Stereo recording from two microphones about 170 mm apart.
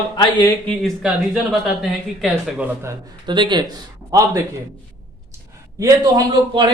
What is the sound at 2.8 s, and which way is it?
Speech, 25° right (ahead or behind).